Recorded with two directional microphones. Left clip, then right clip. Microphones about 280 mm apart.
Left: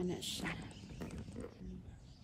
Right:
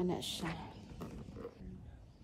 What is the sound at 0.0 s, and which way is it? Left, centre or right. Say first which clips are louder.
Speech: right 3 dB; right.